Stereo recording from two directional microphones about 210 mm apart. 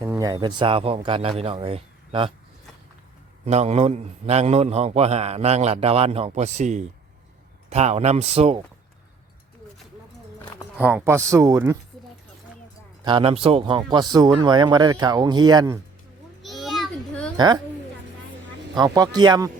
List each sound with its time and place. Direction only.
0.0 s a man's voice: 15° right (ahead or behind)
3.4 s a man's voice: 30° right (ahead or behind)
10.8 s speech: 5° right (ahead or behind)
13.1 s speech: 25° right (ahead or behind)
16.4 s a sound: centre (ahead or behind)
17.3 s a woman's voice: 20° right (ahead or behind)
18.8 s speech: 20° right (ahead or behind)